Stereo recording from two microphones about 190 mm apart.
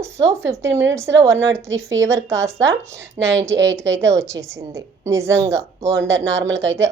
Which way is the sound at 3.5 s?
70° right (ahead or behind).